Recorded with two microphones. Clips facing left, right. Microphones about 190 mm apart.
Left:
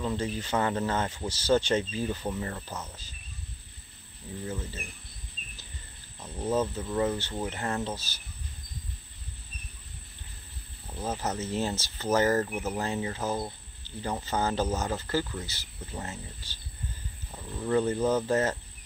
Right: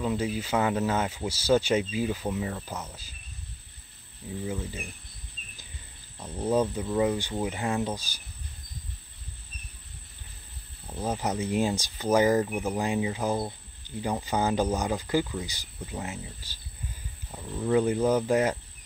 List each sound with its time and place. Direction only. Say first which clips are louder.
0.0 s speech: right 3 dB; 10° right (ahead or behind)
4.5 s speech: right 2 dB; 10° right (ahead or behind)
6.1 s speech: right 3 dB; 10° right (ahead or behind)
11.0 s speech: right 3 dB; 15° right (ahead or behind)